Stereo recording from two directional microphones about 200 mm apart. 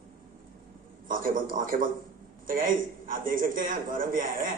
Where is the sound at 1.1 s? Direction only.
45° right (ahead or behind).